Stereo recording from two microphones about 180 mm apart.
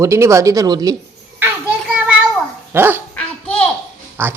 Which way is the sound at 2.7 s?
10° right (ahead or behind).